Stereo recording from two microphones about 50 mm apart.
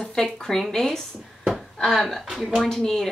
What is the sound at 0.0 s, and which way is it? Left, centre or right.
A woman's voice, centre.